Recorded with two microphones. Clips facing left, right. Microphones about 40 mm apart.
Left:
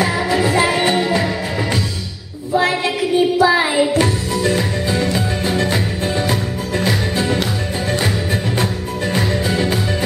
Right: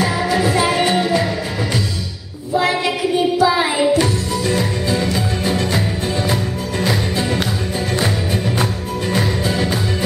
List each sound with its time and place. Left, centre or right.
0.0 s music: centre
3.3 s child singing: centre
4.0 s music: centre
6.8 s music: centre
9.1 s music: centre